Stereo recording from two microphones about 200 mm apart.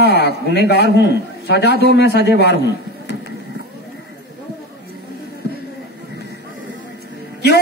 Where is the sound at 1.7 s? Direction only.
50° right (ahead or behind).